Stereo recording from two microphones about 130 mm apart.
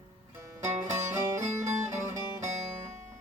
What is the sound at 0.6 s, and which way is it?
Music, 20° right (ahead or behind).